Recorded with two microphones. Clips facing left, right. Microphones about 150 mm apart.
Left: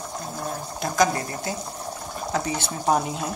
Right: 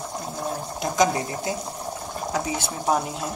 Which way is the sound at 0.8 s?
15° right (ahead or behind).